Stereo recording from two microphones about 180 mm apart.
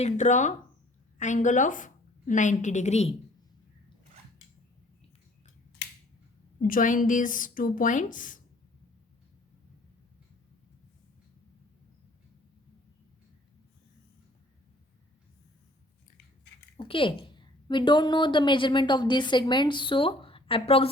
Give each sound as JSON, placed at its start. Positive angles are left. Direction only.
{"t": 0.0, "sound": "a woman's voice", "side_deg": 40}
{"t": 6.6, "sound": "a woman's voice", "side_deg": 45}
{"t": 16.7, "sound": "a woman's voice", "side_deg": 30}